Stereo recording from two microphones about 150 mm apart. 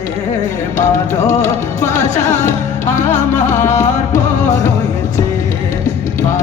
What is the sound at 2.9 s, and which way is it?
Music, 55° left (ahead or behind).